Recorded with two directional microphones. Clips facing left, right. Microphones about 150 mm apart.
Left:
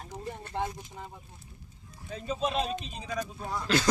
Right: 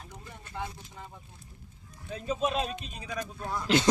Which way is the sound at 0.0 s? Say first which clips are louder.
Left 8 dB; 35° left (ahead or behind).